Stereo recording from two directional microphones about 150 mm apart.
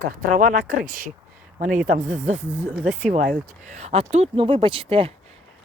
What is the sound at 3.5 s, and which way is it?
Speech, 50° right (ahead or behind).